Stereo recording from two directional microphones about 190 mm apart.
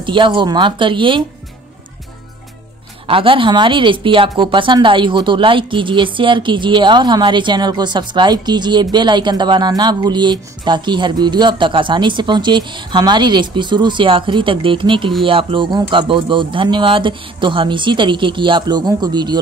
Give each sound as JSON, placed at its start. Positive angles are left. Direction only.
{"t": 0.0, "sound": "speech", "side_deg": -25}
{"t": 3.1, "sound": "speech", "side_deg": -25}